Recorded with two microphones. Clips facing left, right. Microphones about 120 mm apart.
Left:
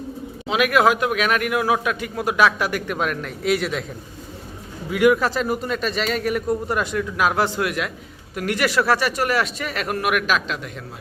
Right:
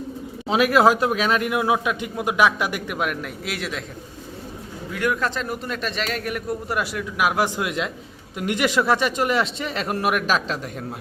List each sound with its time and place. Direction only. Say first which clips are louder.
0.4 s a man's voice: right 1 dB; 30° right (ahead or behind); by 3.8 s centre (ahead or behind)
4.9 s a man's voice: left 7 dB; 10° left (ahead or behind); by 10.6 s 35° right (ahead or behind)